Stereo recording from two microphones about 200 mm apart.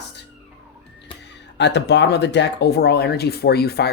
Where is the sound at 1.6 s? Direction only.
60° left (ahead or behind).